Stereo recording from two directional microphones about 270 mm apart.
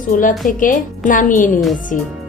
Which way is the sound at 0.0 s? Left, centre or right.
Left.